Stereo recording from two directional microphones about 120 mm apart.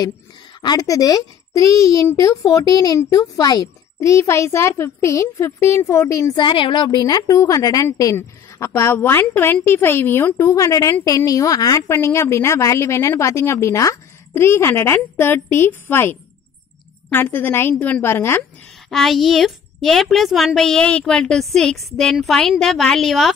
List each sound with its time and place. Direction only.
0.6 s a woman's voice: 30° left (ahead or behind)
6.3 s a woman's voice: 40° left (ahead or behind); by 10.3 s 20° left (ahead or behind)
10.3 s a woman's voice: 30° left (ahead or behind)
18.9 s a woman's voice: centre (ahead or behind)